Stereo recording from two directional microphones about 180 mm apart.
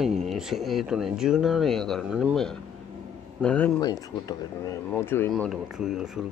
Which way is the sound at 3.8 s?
20° left (ahead or behind).